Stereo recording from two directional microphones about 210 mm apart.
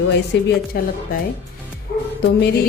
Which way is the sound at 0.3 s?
60° left (ahead or behind).